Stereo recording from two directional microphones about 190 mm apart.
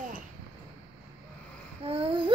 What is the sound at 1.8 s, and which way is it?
Babbling, 30° right (ahead or behind).